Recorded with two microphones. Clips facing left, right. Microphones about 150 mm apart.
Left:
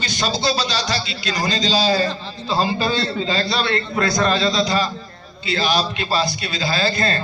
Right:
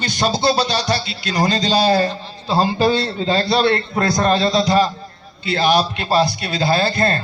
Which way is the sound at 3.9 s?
40° right (ahead or behind).